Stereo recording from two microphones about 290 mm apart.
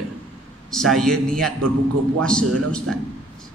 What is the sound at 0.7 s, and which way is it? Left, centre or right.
A man's voice, centre.